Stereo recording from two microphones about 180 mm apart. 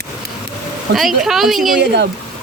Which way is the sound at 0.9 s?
55° right (ahead or behind).